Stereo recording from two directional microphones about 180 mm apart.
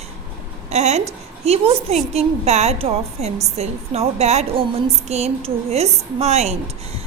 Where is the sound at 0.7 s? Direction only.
40° right (ahead or behind).